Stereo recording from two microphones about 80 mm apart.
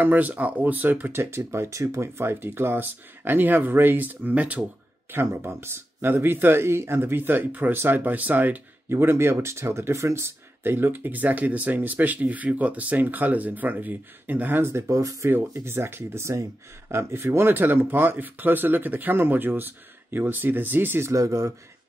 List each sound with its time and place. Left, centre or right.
0.0 s speech: right
5.1 s speech: right
8.9 s speech: right
15.2 s speech: right
21.1 s speech: right